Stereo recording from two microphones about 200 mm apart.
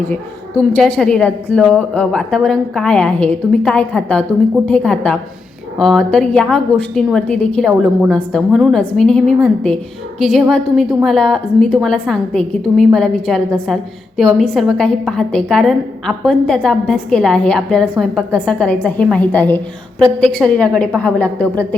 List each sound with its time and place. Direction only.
0.1 s a woman's voice: 5° left (ahead or behind)